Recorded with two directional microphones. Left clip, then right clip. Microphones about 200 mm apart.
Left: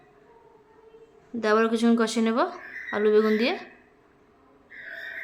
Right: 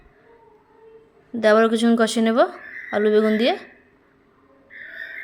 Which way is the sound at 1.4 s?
15° right (ahead or behind).